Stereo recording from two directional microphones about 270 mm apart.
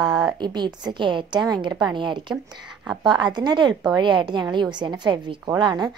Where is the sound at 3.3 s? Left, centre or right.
Centre.